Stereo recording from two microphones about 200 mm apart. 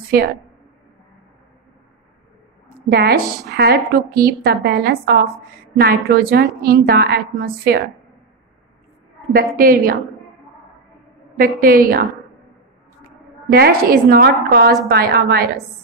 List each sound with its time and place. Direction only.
0.1 s a woman's voice: 50° right (ahead or behind)
2.9 s a woman's voice: 50° right (ahead or behind)
9.3 s a woman's voice: 45° right (ahead or behind)
11.3 s a woman's voice: 45° right (ahead or behind)
13.5 s a woman's voice: 50° right (ahead or behind)